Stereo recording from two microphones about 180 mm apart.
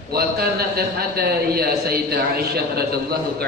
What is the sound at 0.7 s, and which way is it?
A man's voice, 60° right (ahead or behind).